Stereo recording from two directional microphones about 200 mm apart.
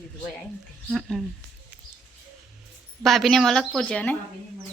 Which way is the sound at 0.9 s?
Centre (ahead or behind).